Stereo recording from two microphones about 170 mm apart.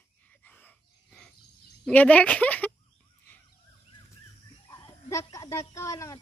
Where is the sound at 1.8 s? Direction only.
10° left (ahead or behind).